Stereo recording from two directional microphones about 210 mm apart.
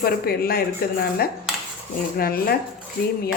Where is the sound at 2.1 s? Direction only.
45° left (ahead or behind).